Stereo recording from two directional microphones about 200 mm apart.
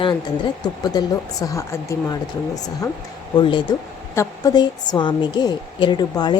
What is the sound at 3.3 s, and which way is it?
A woman's voice, 25° left (ahead or behind).